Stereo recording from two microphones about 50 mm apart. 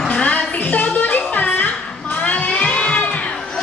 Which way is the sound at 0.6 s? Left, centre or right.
Left.